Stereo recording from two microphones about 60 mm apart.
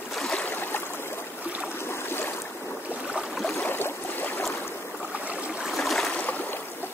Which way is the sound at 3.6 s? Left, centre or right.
Left.